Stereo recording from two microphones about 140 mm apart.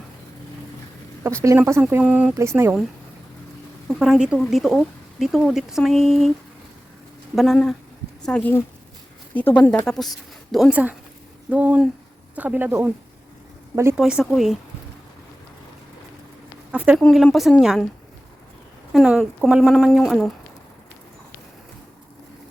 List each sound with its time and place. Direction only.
1.2 s a woman's voice: 20° right (ahead or behind)
1.9 s a woman's voice: 10° right (ahead or behind)
3.8 s speech: 5° right (ahead or behind)
7.3 s speech: centre (ahead or behind)
11.4 s speech: 10° right (ahead or behind)
13.9 s speech: 5° right (ahead or behind)
16.7 s a sound: 10° right (ahead or behind)
17.0 s speech: 5° left (ahead or behind)
18.9 s speech: centre (ahead or behind)